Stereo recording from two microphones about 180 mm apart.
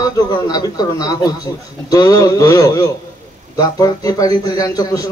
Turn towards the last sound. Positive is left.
turn(degrees=20)  # may be behind; listen again after turning